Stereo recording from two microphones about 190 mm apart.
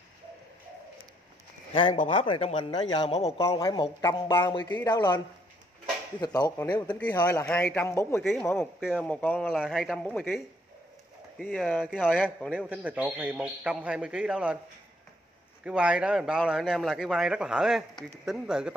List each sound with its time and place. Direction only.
1.7 s speech: 25° left (ahead or behind)
3.4 s speech: 15° left (ahead or behind)
6.2 s a man's voice: 20° left (ahead or behind)
8.2 s a man's voice: centre (ahead or behind)
12.5 s a man's voice: 5° right (ahead or behind)
15.6 s a man's voice: 5° right (ahead or behind)